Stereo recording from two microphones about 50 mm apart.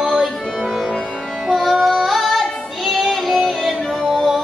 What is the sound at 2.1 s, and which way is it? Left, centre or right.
Female singing, centre.